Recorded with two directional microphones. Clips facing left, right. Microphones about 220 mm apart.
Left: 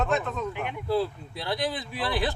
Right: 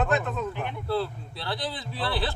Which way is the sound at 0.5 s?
10° left (ahead or behind).